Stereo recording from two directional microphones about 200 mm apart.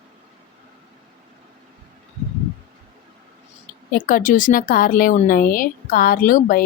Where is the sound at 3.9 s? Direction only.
45° left (ahead or behind).